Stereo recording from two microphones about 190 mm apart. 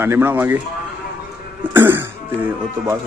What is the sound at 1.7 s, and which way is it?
Cough, 10° right (ahead or behind).